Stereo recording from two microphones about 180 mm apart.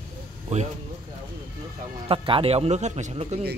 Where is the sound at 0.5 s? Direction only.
40° right (ahead or behind).